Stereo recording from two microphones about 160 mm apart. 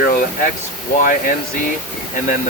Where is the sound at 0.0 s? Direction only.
60° left (ahead or behind).